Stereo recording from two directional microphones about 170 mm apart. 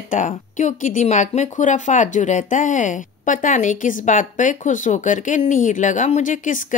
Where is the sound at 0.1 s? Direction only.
45° left (ahead or behind).